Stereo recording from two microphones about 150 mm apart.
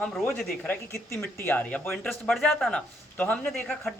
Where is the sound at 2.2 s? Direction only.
Centre (ahead or behind).